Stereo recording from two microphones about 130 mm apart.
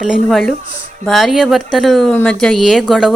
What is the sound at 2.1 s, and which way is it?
Speech, 15° left (ahead or behind).